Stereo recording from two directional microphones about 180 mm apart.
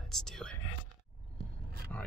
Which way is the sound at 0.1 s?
5° left (ahead or behind).